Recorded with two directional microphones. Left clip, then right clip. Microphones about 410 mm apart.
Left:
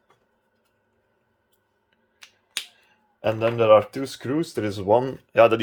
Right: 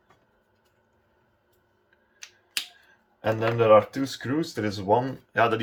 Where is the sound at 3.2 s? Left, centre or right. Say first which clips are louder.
Left 2 dB; centre.